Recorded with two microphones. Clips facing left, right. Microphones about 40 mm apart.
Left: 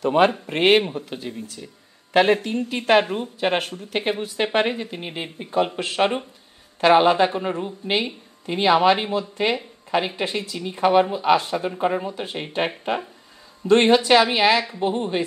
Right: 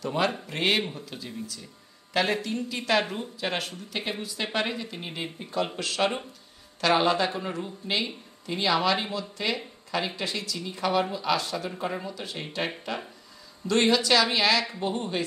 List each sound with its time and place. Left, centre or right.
0.0 s a woman's voice: left